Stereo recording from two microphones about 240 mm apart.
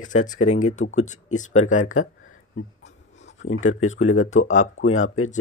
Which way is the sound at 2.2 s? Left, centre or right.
Left.